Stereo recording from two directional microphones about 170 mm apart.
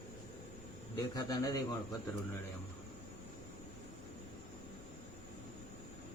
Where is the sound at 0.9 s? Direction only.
20° left (ahead or behind).